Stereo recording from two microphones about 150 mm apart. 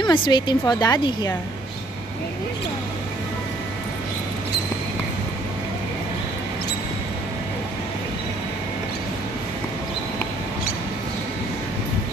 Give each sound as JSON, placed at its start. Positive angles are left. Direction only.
{"t": 0.1, "sound": "a woman's voice", "side_deg": 30}